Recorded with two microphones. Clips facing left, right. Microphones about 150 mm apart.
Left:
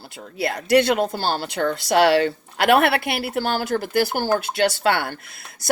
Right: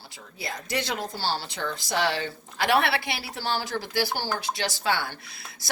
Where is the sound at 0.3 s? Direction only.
70° left (ahead or behind).